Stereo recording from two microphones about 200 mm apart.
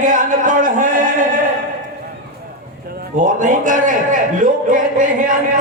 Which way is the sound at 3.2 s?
40° right (ahead or behind).